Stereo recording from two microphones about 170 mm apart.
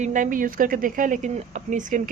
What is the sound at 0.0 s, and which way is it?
Speech, 50° right (ahead or behind).